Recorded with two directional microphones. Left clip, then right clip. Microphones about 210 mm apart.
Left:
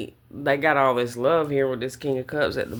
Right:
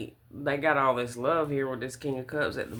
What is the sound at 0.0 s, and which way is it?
Speech, 30° left (ahead or behind).